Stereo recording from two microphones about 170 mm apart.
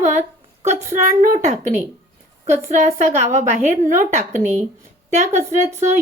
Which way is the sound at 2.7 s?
40° right (ahead or behind).